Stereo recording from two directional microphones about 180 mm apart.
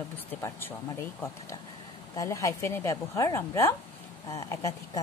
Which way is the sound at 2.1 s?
15° left (ahead or behind).